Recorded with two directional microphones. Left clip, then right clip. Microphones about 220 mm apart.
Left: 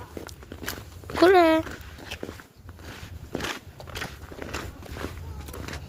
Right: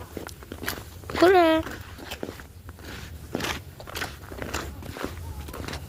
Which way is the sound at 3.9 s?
50° right (ahead or behind).